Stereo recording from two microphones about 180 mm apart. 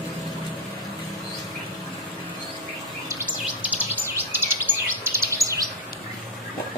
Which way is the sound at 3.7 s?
10° right (ahead or behind).